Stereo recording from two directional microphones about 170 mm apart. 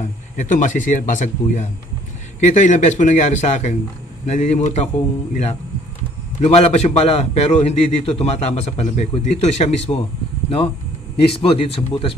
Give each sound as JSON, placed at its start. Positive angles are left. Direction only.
{"t": 0.4, "sound": "a man's voice", "side_deg": 50}
{"t": 11.2, "sound": "a man's voice", "side_deg": 35}